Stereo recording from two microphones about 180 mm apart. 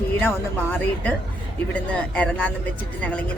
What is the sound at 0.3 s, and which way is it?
Speech, 10° left (ahead or behind).